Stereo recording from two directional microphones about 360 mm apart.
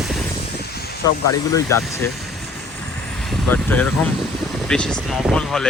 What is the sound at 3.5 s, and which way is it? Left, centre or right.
Speech, centre.